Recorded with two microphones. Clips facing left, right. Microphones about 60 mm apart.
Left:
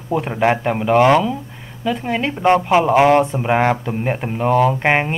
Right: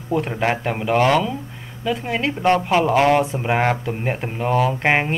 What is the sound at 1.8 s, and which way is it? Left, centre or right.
Speech, centre.